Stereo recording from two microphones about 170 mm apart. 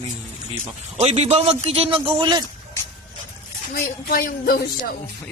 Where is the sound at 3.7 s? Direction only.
60° left (ahead or behind).